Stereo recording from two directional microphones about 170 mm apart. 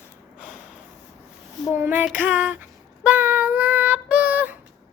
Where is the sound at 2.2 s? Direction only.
10° right (ahead or behind).